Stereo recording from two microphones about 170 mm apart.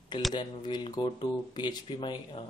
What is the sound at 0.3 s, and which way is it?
Speech, 25° left (ahead or behind).